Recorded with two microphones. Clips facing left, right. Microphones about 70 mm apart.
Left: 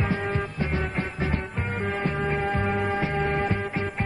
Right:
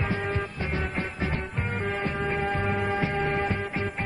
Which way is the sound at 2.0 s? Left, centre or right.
Centre.